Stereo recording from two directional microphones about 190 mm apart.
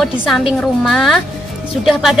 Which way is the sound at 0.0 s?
Centre (ahead or behind).